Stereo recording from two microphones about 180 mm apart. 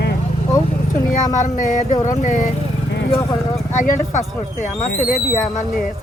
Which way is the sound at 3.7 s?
45° left (ahead or behind).